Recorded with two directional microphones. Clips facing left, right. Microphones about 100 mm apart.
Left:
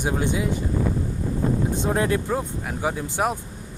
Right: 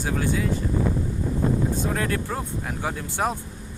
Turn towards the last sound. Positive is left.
turn(degrees=15)  # may be behind; listen again after turning